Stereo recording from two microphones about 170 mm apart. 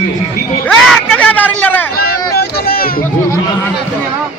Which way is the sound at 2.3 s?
65° left (ahead or behind).